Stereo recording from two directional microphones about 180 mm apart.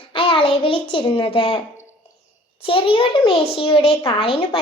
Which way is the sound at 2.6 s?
30° left (ahead or behind).